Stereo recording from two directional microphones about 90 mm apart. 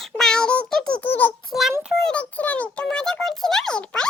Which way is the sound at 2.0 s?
15° left (ahead or behind).